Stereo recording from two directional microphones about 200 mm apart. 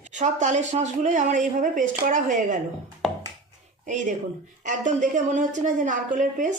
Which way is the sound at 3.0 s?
Centre (ahead or behind).